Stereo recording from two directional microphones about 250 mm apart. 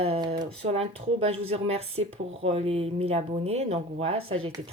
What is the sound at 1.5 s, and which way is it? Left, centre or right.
Speech, right.